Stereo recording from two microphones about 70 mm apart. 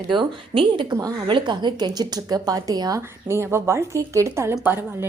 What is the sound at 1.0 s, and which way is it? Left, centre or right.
Speech, right.